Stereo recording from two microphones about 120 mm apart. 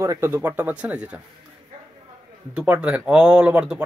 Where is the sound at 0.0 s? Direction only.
20° right (ahead or behind).